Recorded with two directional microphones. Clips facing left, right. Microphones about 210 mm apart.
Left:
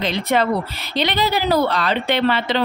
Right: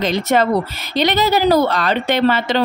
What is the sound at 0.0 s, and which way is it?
A woman's voice, 45° right (ahead or behind).